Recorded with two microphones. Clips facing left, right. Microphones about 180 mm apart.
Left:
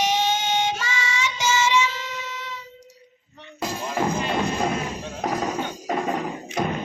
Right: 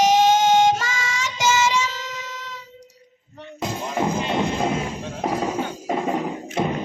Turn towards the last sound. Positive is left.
turn(degrees=-25)  # may be behind; listen again after turning